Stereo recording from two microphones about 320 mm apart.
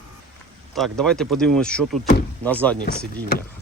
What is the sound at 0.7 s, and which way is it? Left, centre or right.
Speech, centre.